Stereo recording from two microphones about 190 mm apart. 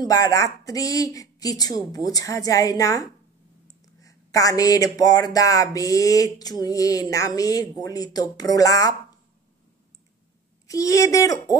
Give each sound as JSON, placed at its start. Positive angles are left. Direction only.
{"t": 0.0, "sound": "speech", "side_deg": 20}
{"t": 10.7, "sound": "speech", "side_deg": 15}